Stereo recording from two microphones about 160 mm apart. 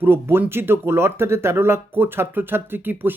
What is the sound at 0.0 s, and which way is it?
Speech, 15° right (ahead or behind).